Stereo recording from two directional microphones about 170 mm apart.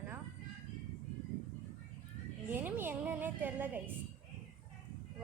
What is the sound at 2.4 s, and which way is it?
Speech, 10° right (ahead or behind).